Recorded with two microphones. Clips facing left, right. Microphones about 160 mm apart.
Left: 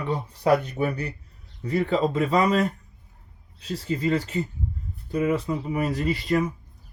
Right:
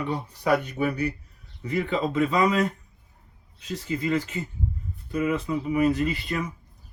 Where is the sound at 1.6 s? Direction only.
35° left (ahead or behind).